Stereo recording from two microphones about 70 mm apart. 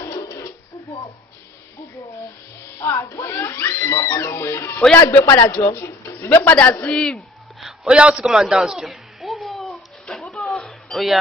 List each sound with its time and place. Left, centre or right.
0.1 s a sound: left
2.8 s speech: left
5.2 s speech: left
5.6 s speech: left
6.5 s a man's voice: centre
7.6 s a sound: centre